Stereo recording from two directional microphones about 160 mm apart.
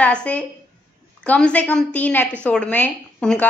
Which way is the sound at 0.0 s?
10° left (ahead or behind).